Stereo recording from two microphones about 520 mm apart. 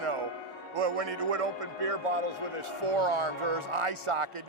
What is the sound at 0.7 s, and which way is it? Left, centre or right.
A man's voice, right.